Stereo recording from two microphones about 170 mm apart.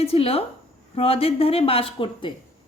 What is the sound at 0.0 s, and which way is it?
A woman's voice, 35° left (ahead or behind).